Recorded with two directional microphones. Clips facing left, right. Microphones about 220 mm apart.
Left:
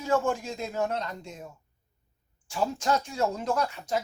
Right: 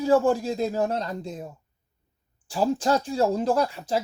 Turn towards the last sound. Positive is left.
turn(degrees=-30)  # may be behind; listen again after turning